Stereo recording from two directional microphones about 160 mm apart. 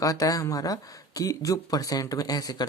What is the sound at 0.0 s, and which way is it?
Speech, 20° left (ahead or behind).